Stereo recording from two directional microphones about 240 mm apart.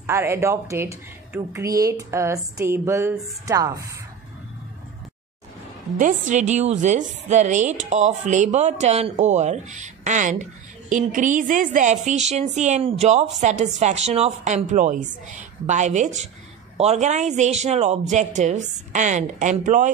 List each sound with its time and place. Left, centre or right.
0.0 s a woman's voice: centre
5.9 s a woman's voice: right